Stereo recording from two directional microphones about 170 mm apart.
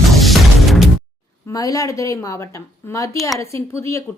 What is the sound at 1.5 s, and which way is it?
A woman's voice, 20° left (ahead or behind).